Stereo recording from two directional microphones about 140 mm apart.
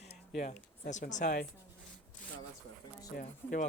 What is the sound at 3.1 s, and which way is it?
Speech, 75° left (ahead or behind).